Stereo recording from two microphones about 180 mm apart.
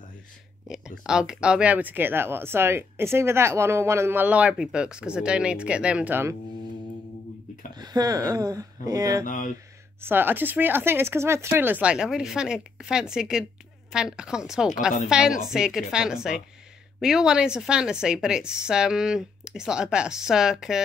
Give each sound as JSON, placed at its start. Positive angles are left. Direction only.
{"t": 0.7, "sound": "speech", "side_deg": -5}
{"t": 7.7, "sound": "speech", "side_deg": -20}
{"t": 9.2, "sound": "speech", "side_deg": 45}
{"t": 9.9, "sound": "a woman's voice", "side_deg": -10}